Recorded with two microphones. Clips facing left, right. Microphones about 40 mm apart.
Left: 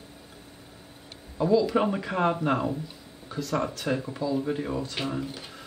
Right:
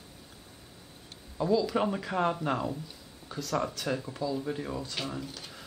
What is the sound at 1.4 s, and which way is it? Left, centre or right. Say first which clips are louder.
Speech: left 4 dB; centre.